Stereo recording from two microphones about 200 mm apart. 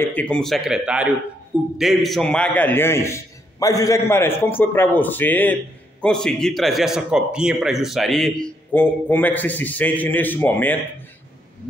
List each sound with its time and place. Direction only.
0.0 s a man's voice: 5° left (ahead or behind)